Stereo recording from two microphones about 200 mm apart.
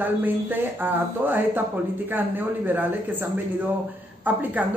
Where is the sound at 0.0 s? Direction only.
10° right (ahead or behind).